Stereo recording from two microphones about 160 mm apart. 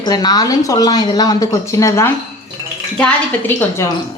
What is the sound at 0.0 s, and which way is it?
A woman's voice, 25° left (ahead or behind).